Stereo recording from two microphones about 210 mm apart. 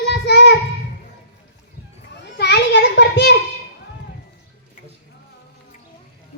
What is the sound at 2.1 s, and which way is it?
Children playing, 55° left (ahead or behind).